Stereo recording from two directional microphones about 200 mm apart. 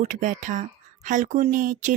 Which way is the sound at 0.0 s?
40° right (ahead or behind).